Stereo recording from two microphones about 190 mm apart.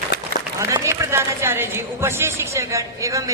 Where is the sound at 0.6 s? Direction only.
15° right (ahead or behind).